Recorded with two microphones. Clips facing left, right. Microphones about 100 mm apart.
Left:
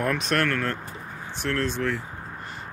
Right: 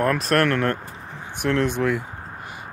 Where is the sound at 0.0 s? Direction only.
Centre (ahead or behind).